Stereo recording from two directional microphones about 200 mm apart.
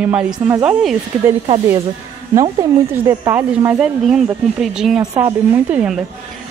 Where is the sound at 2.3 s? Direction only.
15° right (ahead or behind).